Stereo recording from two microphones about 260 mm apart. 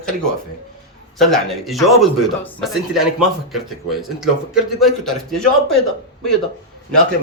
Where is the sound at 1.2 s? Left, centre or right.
Centre.